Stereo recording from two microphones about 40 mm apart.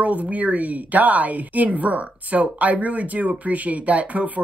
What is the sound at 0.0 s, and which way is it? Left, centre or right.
A woman's voice, right.